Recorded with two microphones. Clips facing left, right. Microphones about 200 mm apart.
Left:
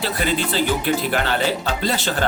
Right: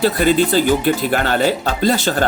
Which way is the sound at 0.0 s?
45° right (ahead or behind).